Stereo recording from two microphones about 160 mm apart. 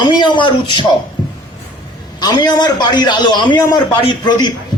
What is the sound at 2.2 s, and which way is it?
A man's voice, 25° left (ahead or behind).